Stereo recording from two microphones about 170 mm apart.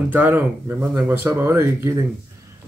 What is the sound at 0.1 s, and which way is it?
A man's voice, 10° right (ahead or behind).